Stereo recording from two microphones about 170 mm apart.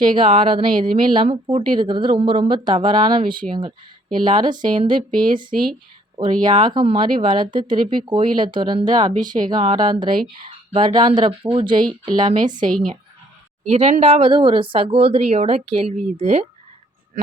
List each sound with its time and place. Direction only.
0.0 s speech: 30° right (ahead or behind)
13.7 s speech: 40° right (ahead or behind)